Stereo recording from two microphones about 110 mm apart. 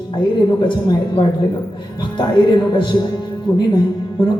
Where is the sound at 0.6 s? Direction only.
45° left (ahead or behind).